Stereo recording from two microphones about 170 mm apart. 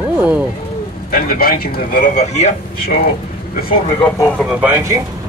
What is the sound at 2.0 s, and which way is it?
Speech, 45° left (ahead or behind).